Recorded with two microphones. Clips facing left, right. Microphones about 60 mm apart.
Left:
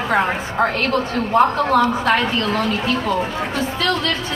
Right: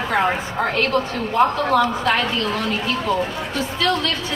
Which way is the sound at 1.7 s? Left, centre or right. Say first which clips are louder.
Left 2 dB; left.